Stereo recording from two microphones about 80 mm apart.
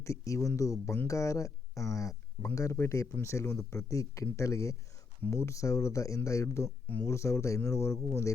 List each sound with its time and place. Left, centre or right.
0.0 s speech: left